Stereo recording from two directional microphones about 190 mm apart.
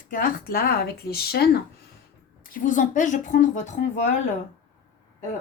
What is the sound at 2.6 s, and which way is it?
A woman's voice, 40° left (ahead or behind).